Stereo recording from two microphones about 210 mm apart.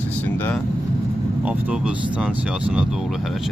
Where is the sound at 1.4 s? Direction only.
5° right (ahead or behind).